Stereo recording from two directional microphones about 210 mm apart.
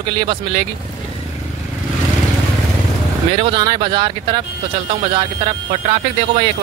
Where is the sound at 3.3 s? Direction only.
25° right (ahead or behind).